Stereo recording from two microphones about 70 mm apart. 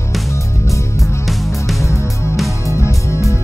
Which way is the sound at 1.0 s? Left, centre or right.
Centre.